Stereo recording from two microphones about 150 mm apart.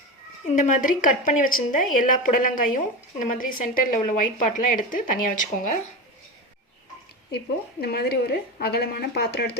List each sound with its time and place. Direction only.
0.4 s a woman's voice: 55° left (ahead or behind)
7.3 s a woman's voice: 90° left